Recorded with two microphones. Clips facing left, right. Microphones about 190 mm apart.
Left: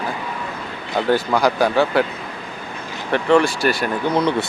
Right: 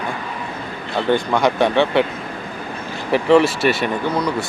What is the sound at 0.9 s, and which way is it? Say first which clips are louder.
Speech: even; 5° left (ahead or behind).